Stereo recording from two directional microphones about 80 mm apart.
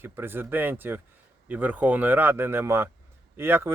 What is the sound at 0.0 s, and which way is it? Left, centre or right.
Speech, right.